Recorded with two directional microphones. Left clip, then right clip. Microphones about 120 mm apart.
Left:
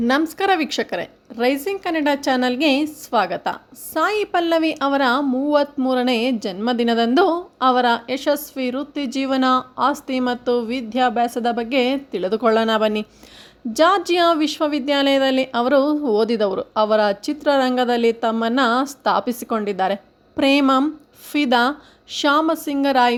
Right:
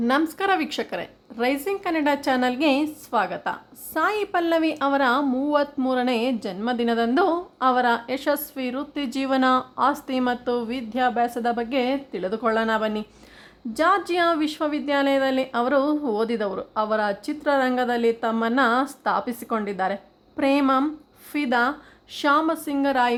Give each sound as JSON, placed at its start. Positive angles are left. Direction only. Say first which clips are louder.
{"t": 0.1, "sound": "a woman's voice", "louder": "left 3 dB", "side_deg": 30}